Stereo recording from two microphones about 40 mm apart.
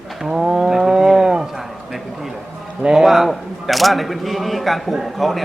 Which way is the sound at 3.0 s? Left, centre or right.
Centre.